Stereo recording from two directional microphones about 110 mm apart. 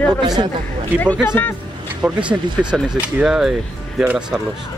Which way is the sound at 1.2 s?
20° left (ahead or behind).